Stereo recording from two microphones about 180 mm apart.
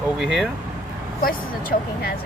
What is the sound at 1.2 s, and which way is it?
Speech, 55° left (ahead or behind).